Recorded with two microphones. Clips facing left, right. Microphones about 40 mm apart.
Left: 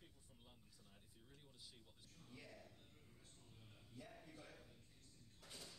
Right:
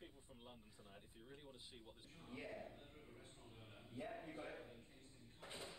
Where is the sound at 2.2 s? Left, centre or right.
Right.